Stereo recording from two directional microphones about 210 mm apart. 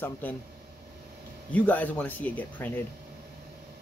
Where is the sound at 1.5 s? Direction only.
5° left (ahead or behind).